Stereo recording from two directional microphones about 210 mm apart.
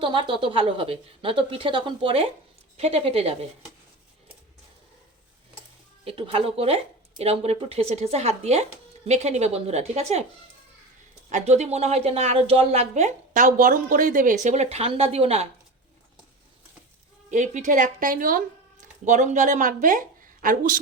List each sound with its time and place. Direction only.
0.0 s a woman's voice: 25° right (ahead or behind)
6.1 s a woman's voice: 25° right (ahead or behind)
11.3 s a woman's voice: 35° right (ahead or behind)
17.3 s speech: 35° right (ahead or behind)